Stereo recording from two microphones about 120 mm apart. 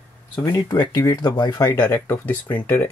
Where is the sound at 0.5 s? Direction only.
35° left (ahead or behind).